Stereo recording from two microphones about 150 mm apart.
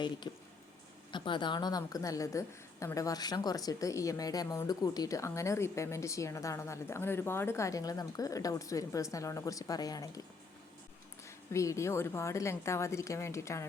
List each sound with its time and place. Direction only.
0.3 s a woman's voice: 30° left (ahead or behind)
11.3 s a woman's voice: 20° left (ahead or behind)